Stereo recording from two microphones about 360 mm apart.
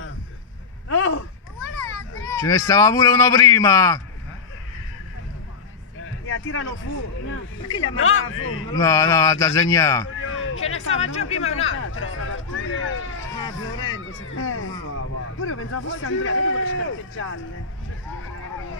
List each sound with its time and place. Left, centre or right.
0.8 s a sound: left
2.3 s a man's voice: centre
6.2 s a sound: left
8.0 s speech: left
8.7 s a man's voice: centre
10.0 s speech: left